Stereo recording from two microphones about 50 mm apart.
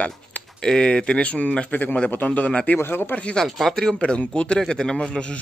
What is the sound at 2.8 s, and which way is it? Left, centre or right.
Speech, left.